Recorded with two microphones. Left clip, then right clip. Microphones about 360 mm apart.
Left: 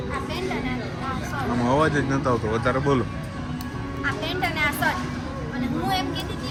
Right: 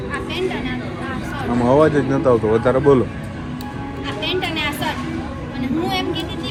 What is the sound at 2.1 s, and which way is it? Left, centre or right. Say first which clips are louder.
Speech: right 8 dB; right.